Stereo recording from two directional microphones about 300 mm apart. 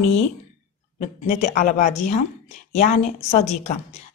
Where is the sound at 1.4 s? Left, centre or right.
Left.